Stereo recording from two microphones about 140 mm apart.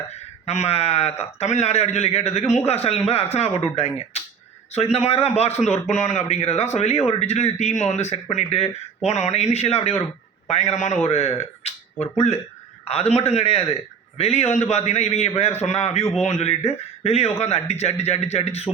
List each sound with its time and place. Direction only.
0.4 s speech: 50° left (ahead or behind)